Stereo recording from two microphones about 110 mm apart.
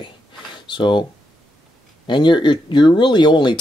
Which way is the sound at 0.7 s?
45° left (ahead or behind).